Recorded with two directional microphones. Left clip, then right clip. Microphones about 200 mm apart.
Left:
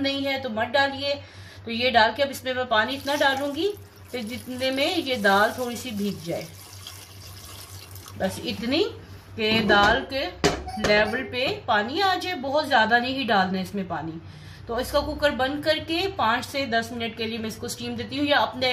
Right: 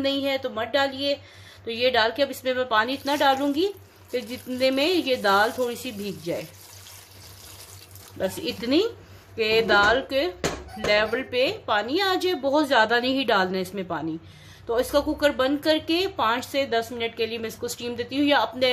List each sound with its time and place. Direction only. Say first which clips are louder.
0.0 s a woman's voice: right 1 dB; 40° right (ahead or behind)
8.2 s a woman's voice: right 1 dB; 45° right (ahead or behind)